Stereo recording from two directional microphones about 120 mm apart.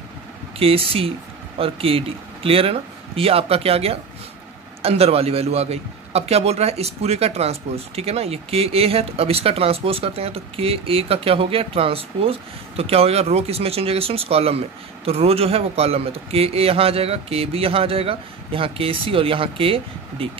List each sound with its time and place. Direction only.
0.6 s a man's voice: 50° right (ahead or behind)